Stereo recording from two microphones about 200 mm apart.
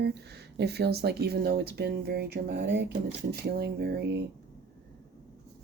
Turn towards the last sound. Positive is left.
turn(degrees=-55)  # may be behind; listen again after turning